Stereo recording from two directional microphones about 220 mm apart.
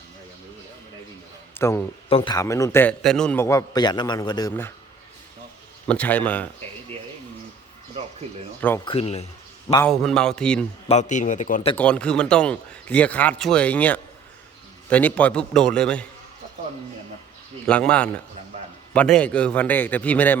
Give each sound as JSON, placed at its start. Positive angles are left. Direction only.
{"t": 1.5, "sound": "a man's voice", "side_deg": 10}
{"t": 2.0, "sound": "a man's voice", "side_deg": 25}
{"t": 5.9, "sound": "a man's voice", "side_deg": 5}
{"t": 8.8, "sound": "speech", "side_deg": 25}
{"t": 9.9, "sound": "speech", "side_deg": 0}
{"t": 10.8, "sound": "a man's voice", "side_deg": 30}
{"t": 11.8, "sound": "speech", "side_deg": 5}
{"t": 17.7, "sound": "a man's voice", "side_deg": 5}